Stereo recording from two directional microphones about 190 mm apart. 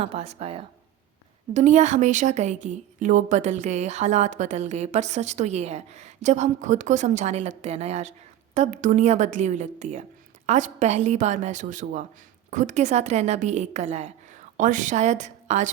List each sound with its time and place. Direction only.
0.0 s a woman's voice: 30° right (ahead or behind)